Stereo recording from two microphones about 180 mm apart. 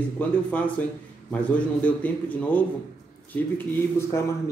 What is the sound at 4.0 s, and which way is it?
Speech, 15° left (ahead or behind).